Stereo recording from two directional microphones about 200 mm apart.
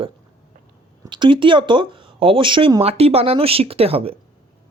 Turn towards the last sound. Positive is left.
turn(degrees=-30)  # may be behind; listen again after turning